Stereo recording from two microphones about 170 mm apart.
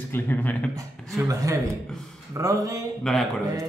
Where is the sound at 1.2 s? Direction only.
20° right (ahead or behind).